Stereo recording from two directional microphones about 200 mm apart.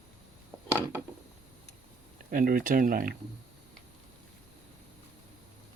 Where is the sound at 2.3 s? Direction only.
45° right (ahead or behind).